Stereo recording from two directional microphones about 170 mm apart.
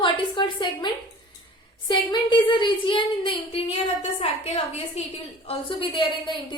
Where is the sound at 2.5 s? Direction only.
30° left (ahead or behind).